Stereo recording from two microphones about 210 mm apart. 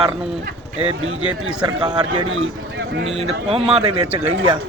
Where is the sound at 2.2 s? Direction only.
65° right (ahead or behind).